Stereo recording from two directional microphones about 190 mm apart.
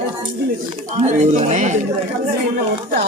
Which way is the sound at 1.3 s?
40° right (ahead or behind).